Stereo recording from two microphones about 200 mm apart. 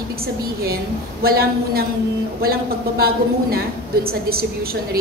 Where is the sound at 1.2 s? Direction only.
50° right (ahead or behind).